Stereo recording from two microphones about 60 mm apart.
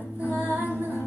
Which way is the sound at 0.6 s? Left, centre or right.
Right.